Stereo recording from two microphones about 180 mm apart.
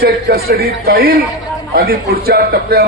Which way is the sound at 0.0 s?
55° right (ahead or behind).